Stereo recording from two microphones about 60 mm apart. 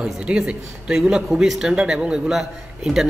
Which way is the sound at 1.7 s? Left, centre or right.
Centre.